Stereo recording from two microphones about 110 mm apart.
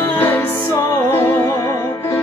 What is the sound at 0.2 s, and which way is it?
Music, 20° left (ahead or behind).